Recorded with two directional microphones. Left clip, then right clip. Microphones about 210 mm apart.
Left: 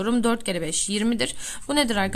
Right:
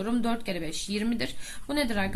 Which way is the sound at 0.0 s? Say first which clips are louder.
Left 6 dB; 35° left (ahead or behind).